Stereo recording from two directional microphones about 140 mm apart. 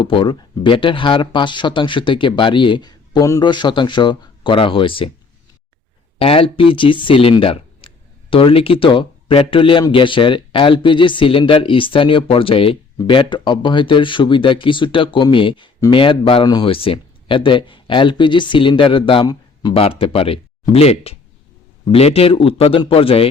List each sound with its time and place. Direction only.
0.0 s speech: 40° left (ahead or behind)
6.1 s speech: 40° left (ahead or behind)